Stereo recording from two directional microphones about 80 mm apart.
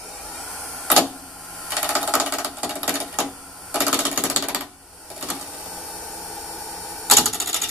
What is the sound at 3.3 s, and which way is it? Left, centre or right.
Sewing machine, centre.